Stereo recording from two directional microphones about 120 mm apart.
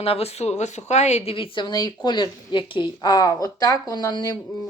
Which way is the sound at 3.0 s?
30° left (ahead or behind).